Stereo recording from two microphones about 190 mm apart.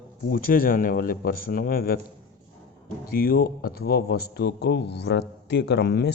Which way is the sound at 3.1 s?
50° left (ahead or behind).